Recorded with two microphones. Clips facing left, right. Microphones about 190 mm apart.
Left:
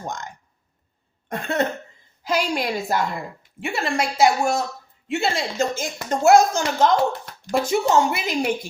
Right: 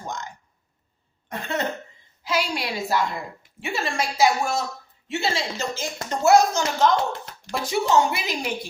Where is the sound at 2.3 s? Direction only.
45° left (ahead or behind).